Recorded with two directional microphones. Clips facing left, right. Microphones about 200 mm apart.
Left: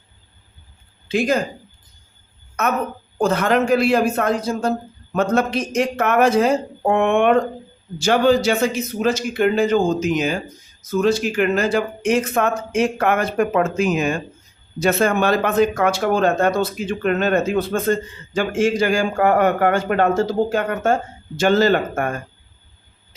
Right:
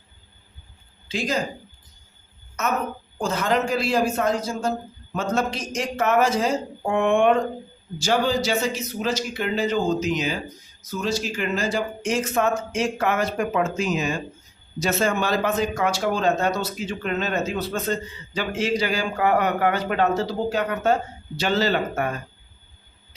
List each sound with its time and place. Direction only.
1.0 s speech: 55° left (ahead or behind)
2.6 s speech: 60° left (ahead or behind)